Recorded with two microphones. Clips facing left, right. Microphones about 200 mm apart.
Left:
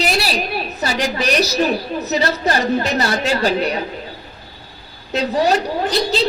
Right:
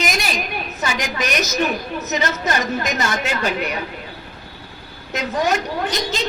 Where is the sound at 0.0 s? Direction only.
35° left (ahead or behind).